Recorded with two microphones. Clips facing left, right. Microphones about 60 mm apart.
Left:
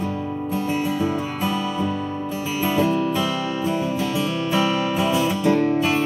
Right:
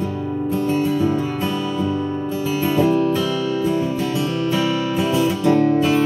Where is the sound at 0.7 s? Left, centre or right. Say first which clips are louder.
Right 4 dB; centre.